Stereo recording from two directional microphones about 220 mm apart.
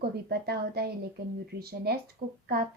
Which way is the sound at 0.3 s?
45° right (ahead or behind).